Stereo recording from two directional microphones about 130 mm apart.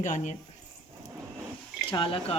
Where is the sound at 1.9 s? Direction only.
45° left (ahead or behind).